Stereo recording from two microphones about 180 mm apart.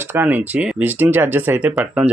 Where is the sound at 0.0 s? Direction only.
10° right (ahead or behind).